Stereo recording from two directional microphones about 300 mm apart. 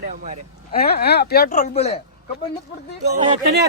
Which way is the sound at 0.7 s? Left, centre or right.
Left.